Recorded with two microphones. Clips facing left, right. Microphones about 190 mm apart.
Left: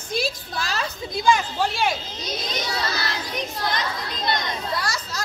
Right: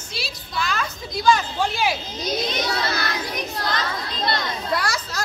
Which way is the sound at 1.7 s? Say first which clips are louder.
Right 2 dB; 5° right (ahead or behind).